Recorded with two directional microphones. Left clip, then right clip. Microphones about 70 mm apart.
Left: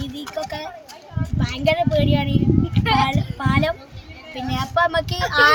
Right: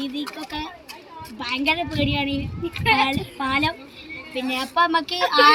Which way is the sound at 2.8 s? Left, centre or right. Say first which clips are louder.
Right 1 dB; left.